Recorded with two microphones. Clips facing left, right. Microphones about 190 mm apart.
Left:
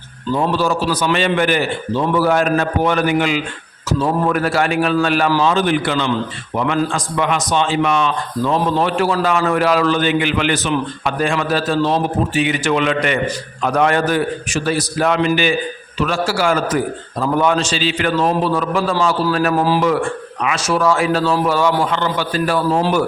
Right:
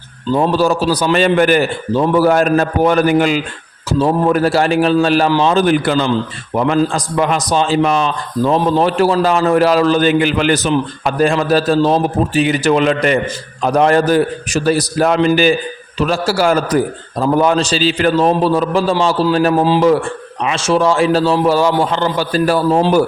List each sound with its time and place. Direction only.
0.3 s a man's voice: 35° right (ahead or behind)
19.5 s speech: 20° right (ahead or behind)
19.8 s a man's voice: 30° right (ahead or behind)